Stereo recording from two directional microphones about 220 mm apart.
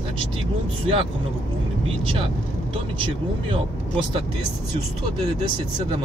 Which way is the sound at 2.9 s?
25° right (ahead or behind).